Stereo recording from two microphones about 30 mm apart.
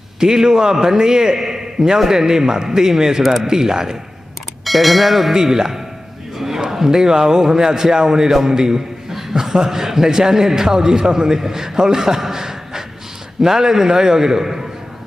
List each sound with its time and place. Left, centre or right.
0.2 s a man's voice: right
4.6 s speech: centre
5.3 s a man's voice: centre
6.3 s a sound: centre
6.7 s a man's voice: centre